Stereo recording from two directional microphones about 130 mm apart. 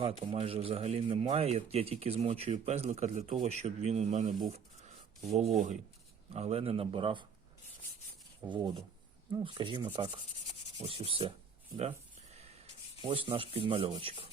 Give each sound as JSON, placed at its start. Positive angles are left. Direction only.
{"t": 0.0, "sound": "speech", "side_deg": -45}
{"t": 4.4, "sound": "a sound", "side_deg": -55}
{"t": 6.3, "sound": "speech", "side_deg": -50}
{"t": 8.4, "sound": "speech", "side_deg": -20}
{"t": 9.4, "sound": "speech", "side_deg": -35}
{"t": 11.9, "sound": "a sound", "side_deg": -50}
{"t": 13.0, "sound": "speech", "side_deg": -45}